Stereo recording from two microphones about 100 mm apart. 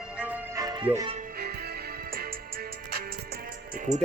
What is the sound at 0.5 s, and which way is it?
Music, 35° right (ahead or behind).